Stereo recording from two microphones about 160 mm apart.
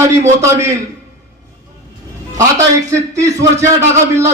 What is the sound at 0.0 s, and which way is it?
Speech, 20° right (ahead or behind).